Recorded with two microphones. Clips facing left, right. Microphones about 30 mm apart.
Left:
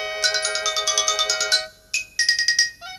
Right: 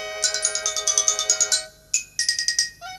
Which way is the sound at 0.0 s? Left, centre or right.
Left.